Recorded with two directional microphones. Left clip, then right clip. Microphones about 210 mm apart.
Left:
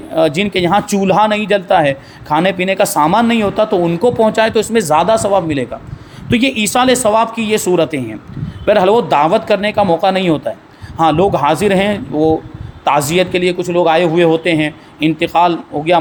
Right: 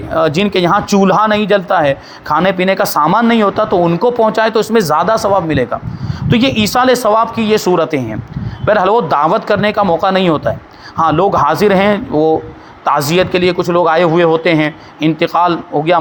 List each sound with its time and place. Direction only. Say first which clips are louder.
0.1 s speech: right 1 dB; 5° right (ahead or behind)
12.1 s speech: even; 30° right (ahead or behind)
12.8 s speech: right 1 dB; 5° right (ahead or behind)